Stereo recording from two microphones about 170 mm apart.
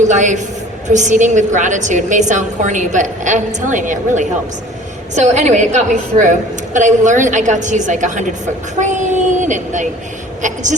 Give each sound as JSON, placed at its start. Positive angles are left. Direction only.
{"t": 0.0, "sound": "a woman's voice", "side_deg": -45}